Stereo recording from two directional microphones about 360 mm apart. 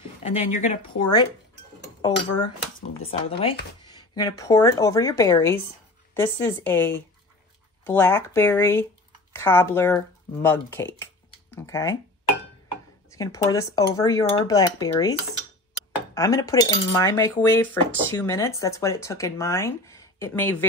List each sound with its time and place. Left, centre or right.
0.2 s speech: centre
13.1 s speech: centre
16.2 s speech: centre